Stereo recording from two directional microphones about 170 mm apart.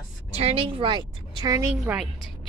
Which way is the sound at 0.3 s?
40° right (ahead or behind).